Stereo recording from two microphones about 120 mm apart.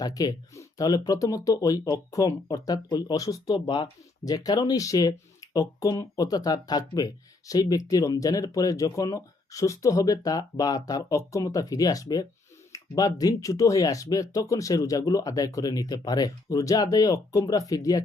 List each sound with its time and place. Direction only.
0.0 s speech: 30° left (ahead or behind)